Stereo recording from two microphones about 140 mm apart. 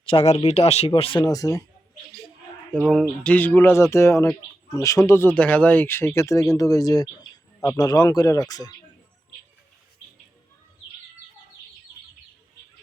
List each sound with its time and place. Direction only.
0.0 s speech: 40° left (ahead or behind)
1.2 s speech: 25° left (ahead or behind)
2.9 s speech: 5° left (ahead or behind); by 8.7 s 25° left (ahead or behind)